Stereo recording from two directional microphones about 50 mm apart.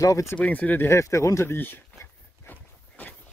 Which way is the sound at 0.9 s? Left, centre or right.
Left.